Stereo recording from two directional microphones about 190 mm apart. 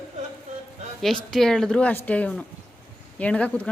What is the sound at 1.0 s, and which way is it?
Speech, centre (ahead or behind).